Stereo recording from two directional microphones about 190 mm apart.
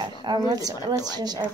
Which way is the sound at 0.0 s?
25° right (ahead or behind).